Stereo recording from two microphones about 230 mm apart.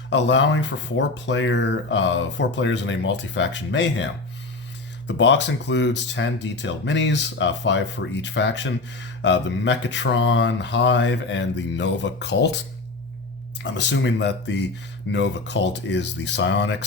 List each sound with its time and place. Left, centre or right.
0.1 s speech: left
13.6 s speech: left